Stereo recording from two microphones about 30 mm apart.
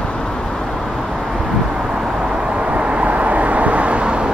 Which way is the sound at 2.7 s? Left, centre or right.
Right.